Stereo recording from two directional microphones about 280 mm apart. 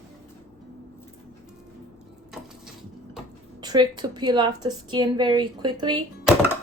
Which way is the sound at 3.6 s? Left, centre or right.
Centre.